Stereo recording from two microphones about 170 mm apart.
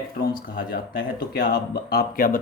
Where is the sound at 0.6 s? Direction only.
85° left; by 2.4 s 60° left (ahead or behind).